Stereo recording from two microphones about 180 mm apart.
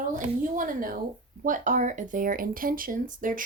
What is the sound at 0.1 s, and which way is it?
Speech, 45° right (ahead or behind).